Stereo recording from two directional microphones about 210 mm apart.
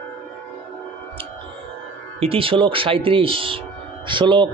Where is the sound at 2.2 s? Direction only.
25° right (ahead or behind).